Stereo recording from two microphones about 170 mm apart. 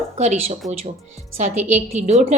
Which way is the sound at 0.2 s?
40° right (ahead or behind).